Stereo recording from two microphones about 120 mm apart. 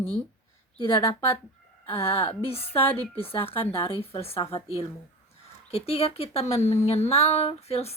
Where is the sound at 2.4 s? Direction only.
55° left (ahead or behind).